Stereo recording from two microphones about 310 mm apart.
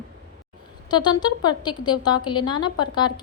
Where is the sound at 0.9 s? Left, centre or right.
Centre.